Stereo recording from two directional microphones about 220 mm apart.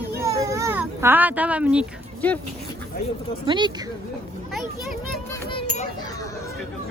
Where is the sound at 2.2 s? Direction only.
5° left (ahead or behind).